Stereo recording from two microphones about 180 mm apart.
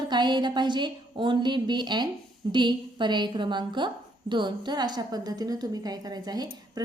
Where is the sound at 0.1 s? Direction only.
25° right (ahead or behind).